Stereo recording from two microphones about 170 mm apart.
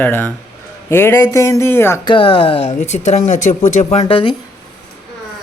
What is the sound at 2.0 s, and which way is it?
Speech, 30° left (ahead or behind).